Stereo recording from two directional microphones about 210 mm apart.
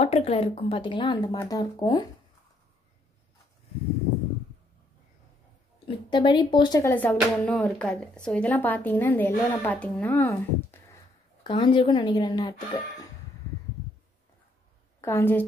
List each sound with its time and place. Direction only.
0.0 s speech: 30° left (ahead or behind)
5.9 s speech: 20° left (ahead or behind)
11.4 s speech: 25° left (ahead or behind)
15.0 s a woman's voice: 10° left (ahead or behind)